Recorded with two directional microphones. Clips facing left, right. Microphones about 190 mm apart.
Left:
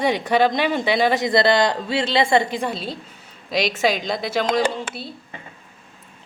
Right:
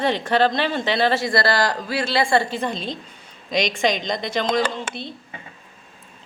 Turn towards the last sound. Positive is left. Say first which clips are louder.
# left 2 dB
turn(degrees=5)  # may be behind; listen again after turning